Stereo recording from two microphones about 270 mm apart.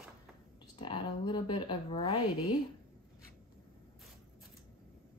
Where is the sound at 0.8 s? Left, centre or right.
Centre.